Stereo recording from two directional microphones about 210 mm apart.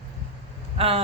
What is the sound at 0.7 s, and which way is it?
Speech, 25° right (ahead or behind).